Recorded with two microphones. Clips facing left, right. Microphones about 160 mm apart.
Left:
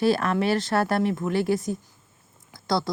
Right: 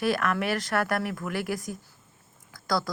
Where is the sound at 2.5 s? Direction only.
25° left (ahead or behind).